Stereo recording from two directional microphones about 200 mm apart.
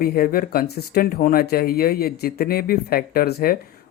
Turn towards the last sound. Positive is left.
turn(degrees=50)  # may be behind; listen again after turning